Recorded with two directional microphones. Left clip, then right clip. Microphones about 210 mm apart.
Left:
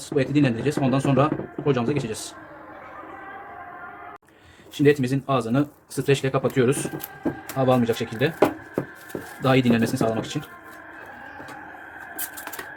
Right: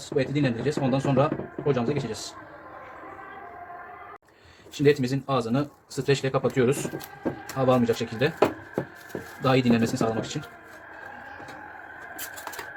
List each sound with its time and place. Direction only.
0.2 s speech: 20° left (ahead or behind)
4.8 s speech: 15° left (ahead or behind)
9.4 s speech: 10° left (ahead or behind)